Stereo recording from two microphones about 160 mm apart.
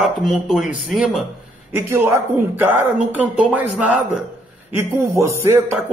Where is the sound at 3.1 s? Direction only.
10° right (ahead or behind).